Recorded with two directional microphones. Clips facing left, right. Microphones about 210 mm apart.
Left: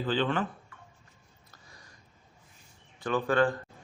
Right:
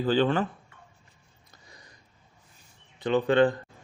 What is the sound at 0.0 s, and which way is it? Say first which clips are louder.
Speech: right 5 dB; 40° right (ahead or behind).